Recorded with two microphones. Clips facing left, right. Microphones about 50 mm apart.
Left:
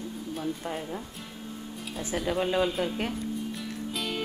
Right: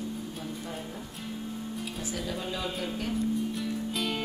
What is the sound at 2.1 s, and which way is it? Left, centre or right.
Speech, left.